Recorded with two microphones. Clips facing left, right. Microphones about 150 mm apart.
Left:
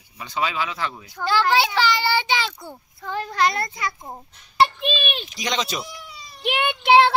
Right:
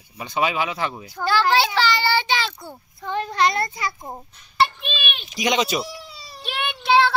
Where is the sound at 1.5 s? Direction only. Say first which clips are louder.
Even; 15° left (ahead or behind).